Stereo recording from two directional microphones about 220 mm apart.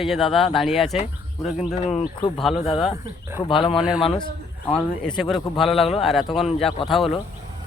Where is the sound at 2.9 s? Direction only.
10° right (ahead or behind).